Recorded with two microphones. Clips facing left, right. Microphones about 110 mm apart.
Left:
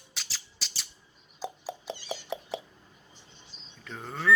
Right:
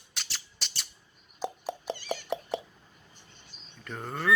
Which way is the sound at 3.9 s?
5° right (ahead or behind).